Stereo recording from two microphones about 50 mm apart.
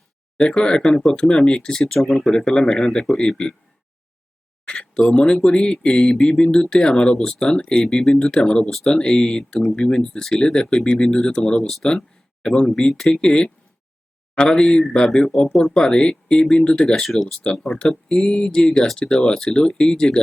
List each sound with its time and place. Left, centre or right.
0.3 s speech: centre
2.4 s speech: centre
4.6 s a sound: centre
5.3 s speech: centre
8.9 s speech: centre
16.9 s speech: centre